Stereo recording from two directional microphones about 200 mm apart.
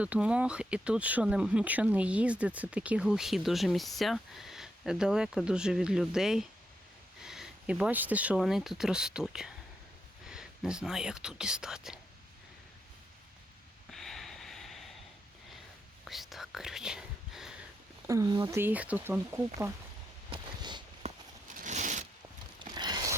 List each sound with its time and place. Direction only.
0.0 s speech: 5° right (ahead or behind)
13.9 s snort: centre (ahead or behind)
16.0 s whispering: centre (ahead or behind)
18.1 s speech: 20° right (ahead or behind)
20.3 s a sound: 20° right (ahead or behind); by 22.0 s 35° right (ahead or behind)
22.6 s a sound: 20° right (ahead or behind)